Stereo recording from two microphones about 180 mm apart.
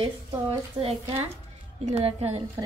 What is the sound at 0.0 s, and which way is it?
A woman's voice, 30° right (ahead or behind).